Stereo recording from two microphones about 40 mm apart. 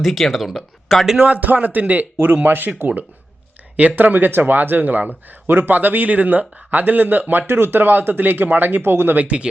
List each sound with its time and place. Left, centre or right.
0.0 s speech: centre
1.2 s speech: right
2.1 s speech: right
5.5 s speech: right
7.4 s speech: right